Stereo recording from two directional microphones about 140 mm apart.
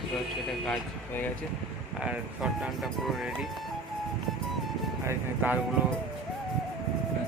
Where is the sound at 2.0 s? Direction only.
5° right (ahead or behind).